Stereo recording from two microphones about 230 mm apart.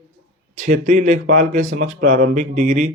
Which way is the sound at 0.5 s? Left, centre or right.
Right.